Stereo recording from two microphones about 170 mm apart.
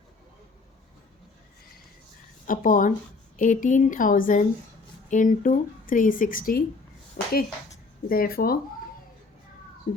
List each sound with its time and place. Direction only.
2.5 s speech: 50° left (ahead or behind)
7.2 s a sound: 65° left (ahead or behind)
8.1 s speech: 60° left (ahead or behind)